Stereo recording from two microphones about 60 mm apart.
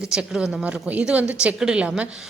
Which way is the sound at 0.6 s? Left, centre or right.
Right.